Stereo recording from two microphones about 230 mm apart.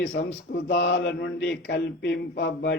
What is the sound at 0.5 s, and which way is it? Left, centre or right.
Speech, left.